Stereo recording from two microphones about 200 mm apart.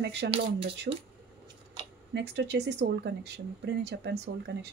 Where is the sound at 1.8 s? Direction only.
25° right (ahead or behind).